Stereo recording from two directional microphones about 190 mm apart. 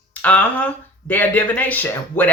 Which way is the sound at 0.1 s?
5° left (ahead or behind).